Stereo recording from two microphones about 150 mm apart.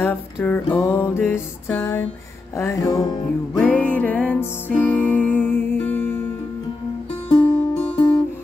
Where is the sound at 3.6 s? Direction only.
10° left (ahead or behind).